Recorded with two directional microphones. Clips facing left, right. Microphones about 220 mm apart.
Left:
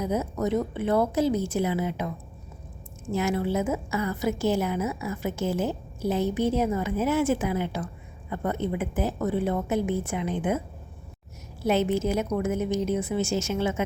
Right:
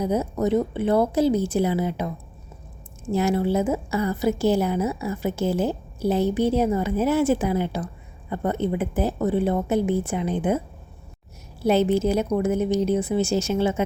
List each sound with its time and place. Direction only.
0.0 s a woman's voice: 30° right (ahead or behind)
11.6 s a woman's voice: 35° right (ahead or behind)